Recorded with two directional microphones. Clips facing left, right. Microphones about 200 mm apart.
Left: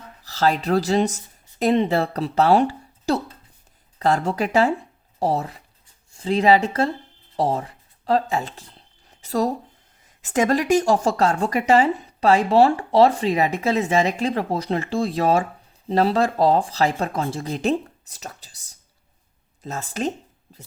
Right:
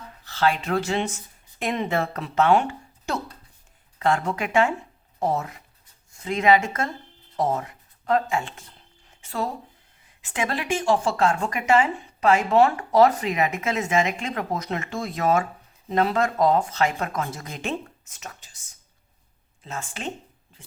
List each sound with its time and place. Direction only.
0.3 s speech: 40° left (ahead or behind)
9.0 s a sound: 40° left (ahead or behind)
10.2 s speech: 45° left (ahead or behind)